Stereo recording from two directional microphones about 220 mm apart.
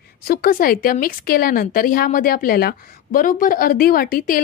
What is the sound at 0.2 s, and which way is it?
A woman's voice, 45° left (ahead or behind).